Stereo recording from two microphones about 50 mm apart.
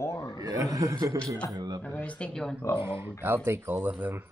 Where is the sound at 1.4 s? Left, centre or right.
Left.